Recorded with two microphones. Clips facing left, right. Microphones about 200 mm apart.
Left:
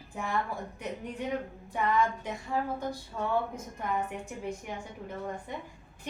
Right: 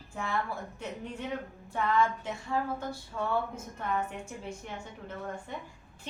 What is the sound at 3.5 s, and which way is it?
A woman's voice, 15° left (ahead or behind).